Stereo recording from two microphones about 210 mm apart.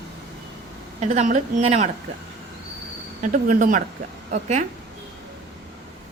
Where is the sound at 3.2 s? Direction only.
40° right (ahead or behind).